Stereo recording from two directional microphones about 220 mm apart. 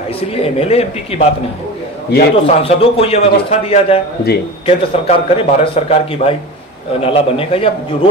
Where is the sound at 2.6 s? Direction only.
25° left (ahead or behind).